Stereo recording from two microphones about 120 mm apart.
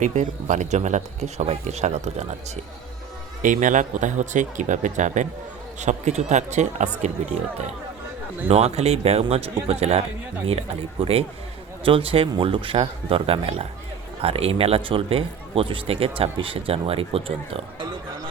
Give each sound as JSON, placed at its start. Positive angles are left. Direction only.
{"t": 0.0, "sound": "speech", "side_deg": -85}
{"t": 3.4, "sound": "speech", "side_deg": -90}
{"t": 5.8, "sound": "speech", "side_deg": -75}
{"t": 8.4, "sound": "a man's voice", "side_deg": -60}
{"t": 11.0, "sound": "a man's voice", "side_deg": -55}